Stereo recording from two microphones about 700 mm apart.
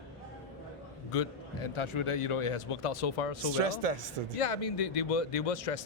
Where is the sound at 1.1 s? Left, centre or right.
Left.